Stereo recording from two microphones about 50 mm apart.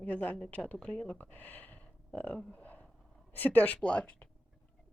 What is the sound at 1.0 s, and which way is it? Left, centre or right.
Speech, left.